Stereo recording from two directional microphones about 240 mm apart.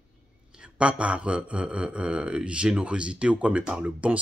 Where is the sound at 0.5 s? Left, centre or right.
Centre.